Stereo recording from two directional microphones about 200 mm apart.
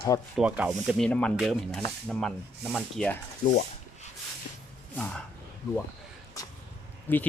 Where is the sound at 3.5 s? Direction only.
35° left (ahead or behind).